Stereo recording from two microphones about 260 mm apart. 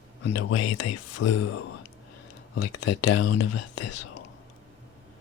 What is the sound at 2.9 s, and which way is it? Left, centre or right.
Speech, left.